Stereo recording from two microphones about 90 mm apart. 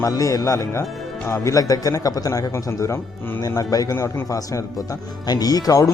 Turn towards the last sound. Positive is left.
turn(degrees=40)  # may be behind; listen again after turning